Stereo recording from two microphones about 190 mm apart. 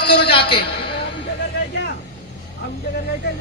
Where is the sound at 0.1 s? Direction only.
30° left (ahead or behind).